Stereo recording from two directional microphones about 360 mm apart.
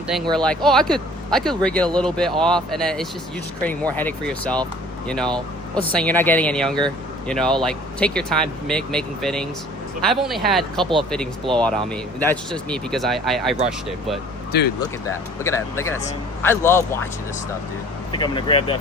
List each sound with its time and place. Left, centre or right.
0.1 s speech: centre
14.5 s speech: left
15.0 s speech: centre
18.1 s speech: centre